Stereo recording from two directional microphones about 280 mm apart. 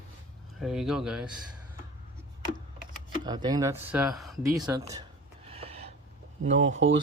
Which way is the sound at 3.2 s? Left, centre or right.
Centre.